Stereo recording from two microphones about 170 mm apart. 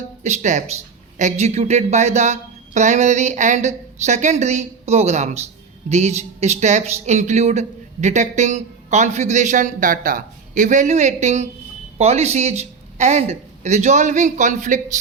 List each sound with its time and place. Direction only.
0.2 s speech: 40° right (ahead or behind)